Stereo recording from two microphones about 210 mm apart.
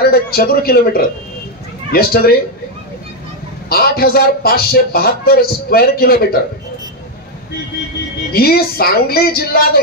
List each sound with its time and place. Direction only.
0.0 s a man's voice: 45° left (ahead or behind)
3.6 s a man's voice: 45° left (ahead or behind)
8.3 s a man's voice: 45° left (ahead or behind)